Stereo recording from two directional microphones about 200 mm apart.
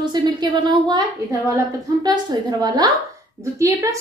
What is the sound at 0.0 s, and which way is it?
Speech, 20° right (ahead or behind).